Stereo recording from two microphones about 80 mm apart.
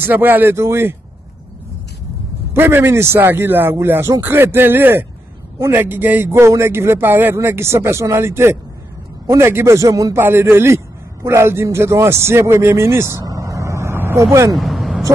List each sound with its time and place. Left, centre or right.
0.0 s a man's voice: right
2.5 s a man's voice: right
13.2 s vehicle: right
14.5 s vehicle: centre